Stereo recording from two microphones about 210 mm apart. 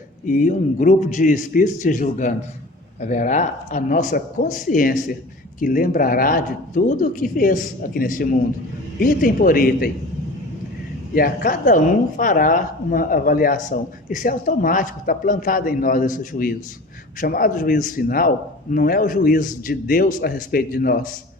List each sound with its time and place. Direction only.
0.3 s a man's voice: 40° left (ahead or behind)
11.1 s a man's voice: 45° left (ahead or behind)